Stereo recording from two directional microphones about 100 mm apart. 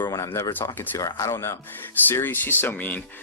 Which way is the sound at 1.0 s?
35° left (ahead or behind).